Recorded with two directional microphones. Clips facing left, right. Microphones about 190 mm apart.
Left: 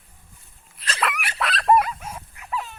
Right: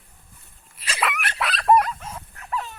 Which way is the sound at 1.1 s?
10° left (ahead or behind).